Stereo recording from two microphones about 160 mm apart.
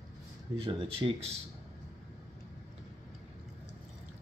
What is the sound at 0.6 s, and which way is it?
Speech, 35° right (ahead or behind).